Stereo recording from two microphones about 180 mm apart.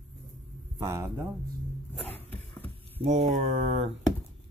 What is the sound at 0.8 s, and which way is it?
Speech, 15° right (ahead or behind).